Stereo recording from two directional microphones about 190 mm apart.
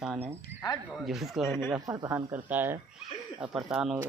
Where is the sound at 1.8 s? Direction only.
20° right (ahead or behind).